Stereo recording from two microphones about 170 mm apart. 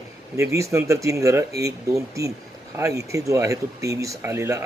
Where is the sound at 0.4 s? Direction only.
15° right (ahead or behind).